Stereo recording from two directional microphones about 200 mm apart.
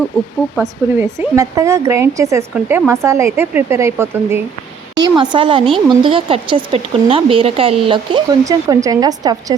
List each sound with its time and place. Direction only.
0.6 s speech: 15° right (ahead or behind)